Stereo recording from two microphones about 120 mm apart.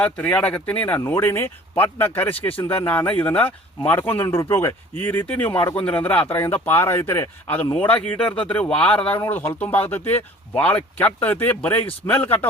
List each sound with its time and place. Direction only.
0.0 s speech: 15° left (ahead or behind)